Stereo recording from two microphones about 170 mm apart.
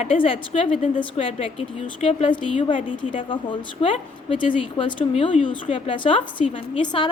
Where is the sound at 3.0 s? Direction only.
30° left (ahead or behind).